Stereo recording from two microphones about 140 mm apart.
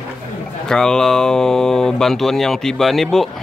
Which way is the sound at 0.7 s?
5° left (ahead or behind).